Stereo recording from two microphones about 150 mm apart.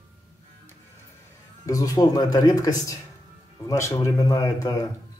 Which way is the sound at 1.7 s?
25° left (ahead or behind).